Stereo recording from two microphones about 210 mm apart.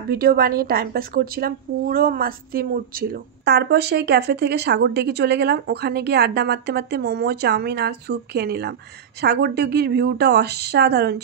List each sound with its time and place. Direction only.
0.1 s a woman's voice: 45° right (ahead or behind)